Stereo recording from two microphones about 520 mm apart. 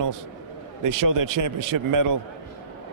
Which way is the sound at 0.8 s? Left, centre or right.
Right.